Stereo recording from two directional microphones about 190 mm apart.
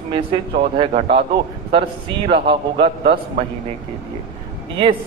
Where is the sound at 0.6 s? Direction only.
30° right (ahead or behind).